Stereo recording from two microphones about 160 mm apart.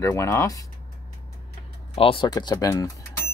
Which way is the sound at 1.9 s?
35° left (ahead or behind).